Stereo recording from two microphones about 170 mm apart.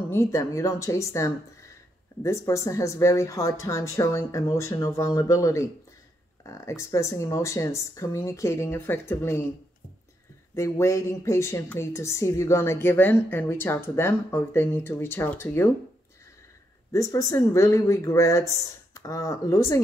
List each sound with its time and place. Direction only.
0.1 s a woman's voice: 20° left (ahead or behind)
10.5 s a woman's voice: 15° left (ahead or behind)
16.9 s speech: 20° left (ahead or behind)